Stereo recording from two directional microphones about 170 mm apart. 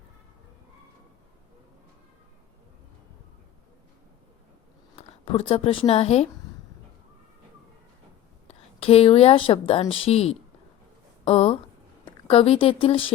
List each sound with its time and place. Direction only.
5.2 s speech: 35° left (ahead or behind)
8.4 s a woman's voice: 35° left (ahead or behind)